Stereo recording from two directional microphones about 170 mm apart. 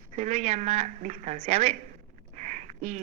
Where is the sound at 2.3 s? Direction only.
45° right (ahead or behind).